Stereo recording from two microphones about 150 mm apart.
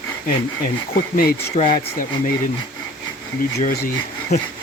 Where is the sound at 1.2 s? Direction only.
60° left (ahead or behind).